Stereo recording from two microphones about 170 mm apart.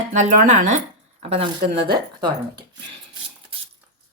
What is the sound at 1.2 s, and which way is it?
Speech, 35° right (ahead or behind).